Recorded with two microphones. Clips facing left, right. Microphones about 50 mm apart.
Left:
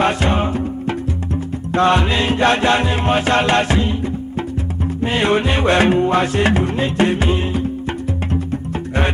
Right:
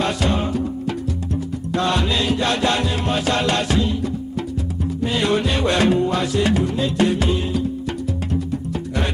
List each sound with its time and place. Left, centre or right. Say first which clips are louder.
0.0 s music: left 4 dB; left
5.0 s music: left 3 dB; left